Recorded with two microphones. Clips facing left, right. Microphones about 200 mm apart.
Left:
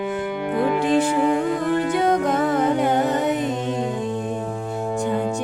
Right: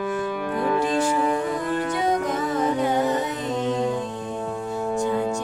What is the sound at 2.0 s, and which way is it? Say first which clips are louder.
Music: left 4 dB; 60° left (ahead or behind).